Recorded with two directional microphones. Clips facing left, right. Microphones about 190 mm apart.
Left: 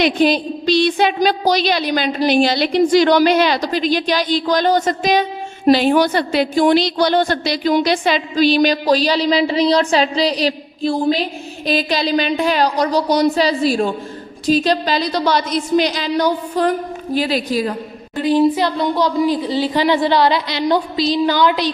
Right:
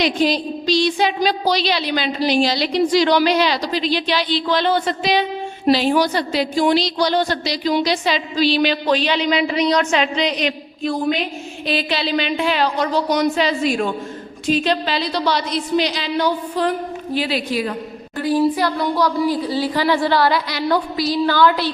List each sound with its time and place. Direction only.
0.0 s a woman's voice: 55° left (ahead or behind); by 17.7 s 40° left (ahead or behind)
18.2 s speech: 20° left (ahead or behind)